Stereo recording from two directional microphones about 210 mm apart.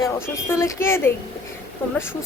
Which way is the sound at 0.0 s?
10° left (ahead or behind).